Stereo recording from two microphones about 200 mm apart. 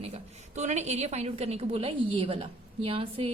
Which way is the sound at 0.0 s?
35° right (ahead or behind).